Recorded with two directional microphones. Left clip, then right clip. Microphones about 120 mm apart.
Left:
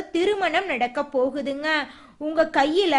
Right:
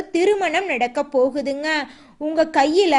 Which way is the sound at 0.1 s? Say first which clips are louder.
Right 4 dB; 25° right (ahead or behind).